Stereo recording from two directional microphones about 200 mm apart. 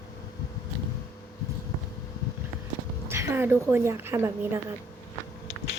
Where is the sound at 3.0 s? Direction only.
10° right (ahead or behind).